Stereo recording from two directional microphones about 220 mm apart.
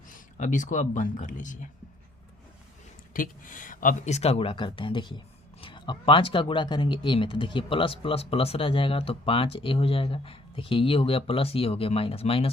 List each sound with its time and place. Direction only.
0.1 s speech: 35° left (ahead or behind)
3.1 s speech: 40° left (ahead or behind)